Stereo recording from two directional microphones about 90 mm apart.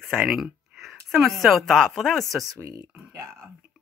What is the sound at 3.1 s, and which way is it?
Speech, 30° right (ahead or behind).